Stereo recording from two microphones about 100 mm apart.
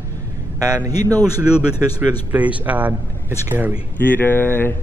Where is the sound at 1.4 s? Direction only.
10° right (ahead or behind).